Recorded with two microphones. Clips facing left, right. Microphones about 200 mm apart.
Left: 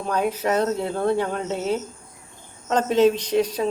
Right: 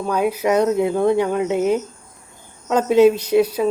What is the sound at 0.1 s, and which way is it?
Speech, 10° right (ahead or behind).